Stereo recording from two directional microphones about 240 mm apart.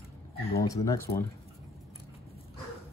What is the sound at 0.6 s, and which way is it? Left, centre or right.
Speech, centre.